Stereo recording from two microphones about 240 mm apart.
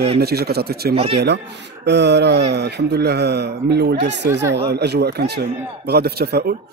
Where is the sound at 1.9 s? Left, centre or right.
Right.